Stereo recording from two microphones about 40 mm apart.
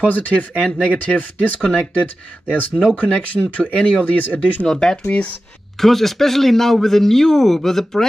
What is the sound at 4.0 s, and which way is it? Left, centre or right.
Speech, left.